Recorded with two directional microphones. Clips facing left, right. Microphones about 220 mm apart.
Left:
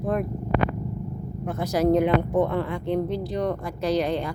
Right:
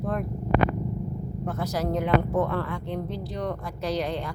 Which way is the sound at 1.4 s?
15° left (ahead or behind).